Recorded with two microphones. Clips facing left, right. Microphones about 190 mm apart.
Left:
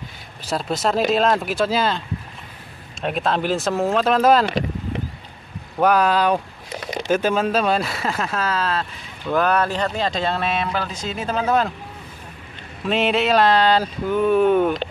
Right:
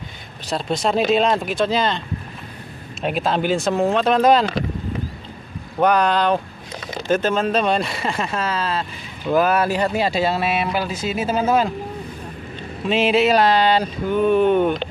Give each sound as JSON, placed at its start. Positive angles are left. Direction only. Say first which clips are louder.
{"t": 0.5, "sound": "speech", "louder": "right 1 dB", "side_deg": 5}
{"t": 5.8, "sound": "speech", "louder": "even", "side_deg": 5}
{"t": 12.8, "sound": "speech", "louder": "right 3 dB", "side_deg": 0}